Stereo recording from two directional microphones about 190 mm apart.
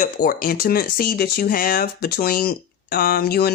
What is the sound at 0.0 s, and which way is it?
Speech, 50° left (ahead or behind).